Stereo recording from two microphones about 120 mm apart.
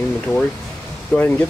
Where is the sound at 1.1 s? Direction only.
15° left (ahead or behind).